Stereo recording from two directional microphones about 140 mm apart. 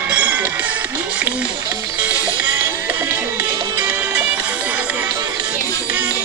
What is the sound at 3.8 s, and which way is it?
Music, 10° right (ahead or behind).